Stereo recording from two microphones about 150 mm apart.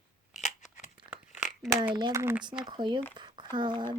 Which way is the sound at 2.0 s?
30° right (ahead or behind).